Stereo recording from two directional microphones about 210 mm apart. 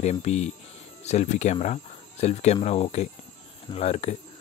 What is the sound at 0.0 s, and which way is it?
Speech, 30° left (ahead or behind).